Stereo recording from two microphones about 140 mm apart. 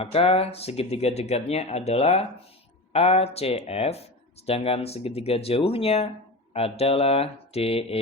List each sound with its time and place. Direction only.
0.0 s speech: 45° left (ahead or behind)